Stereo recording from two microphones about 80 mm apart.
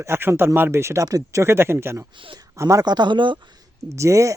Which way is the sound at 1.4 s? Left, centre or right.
Right.